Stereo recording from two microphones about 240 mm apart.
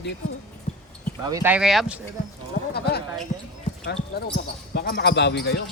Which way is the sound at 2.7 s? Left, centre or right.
Left.